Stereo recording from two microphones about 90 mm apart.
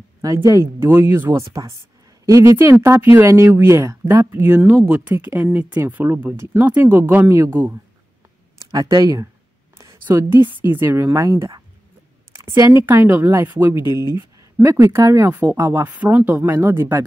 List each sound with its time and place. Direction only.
0.2 s speech: 40° right (ahead or behind)
2.2 s speech: 35° right (ahead or behind)
2.5 s speech: 25° right (ahead or behind)
8.5 s speech: 40° right (ahead or behind)
10.0 s speech: 25° right (ahead or behind)
11.1 s speech: 35° right (ahead or behind)
15.8 s speech: 20° right (ahead or behind)